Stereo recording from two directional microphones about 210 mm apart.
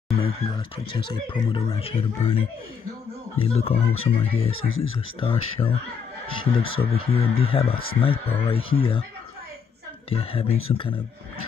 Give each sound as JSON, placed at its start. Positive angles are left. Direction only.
{"t": 0.9, "sound": "speech", "side_deg": 25}
{"t": 3.3, "sound": "speech", "side_deg": 30}
{"t": 4.5, "sound": "speech", "side_deg": 75}
{"t": 5.2, "sound": "speech", "side_deg": 25}
{"t": 10.0, "sound": "speech", "side_deg": 25}